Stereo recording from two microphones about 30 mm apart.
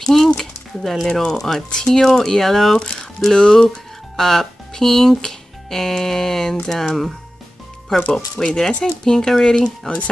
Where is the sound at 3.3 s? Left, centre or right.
Left.